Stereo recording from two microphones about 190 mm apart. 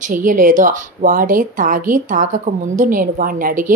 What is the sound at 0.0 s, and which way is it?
Speech, 45° right (ahead or behind).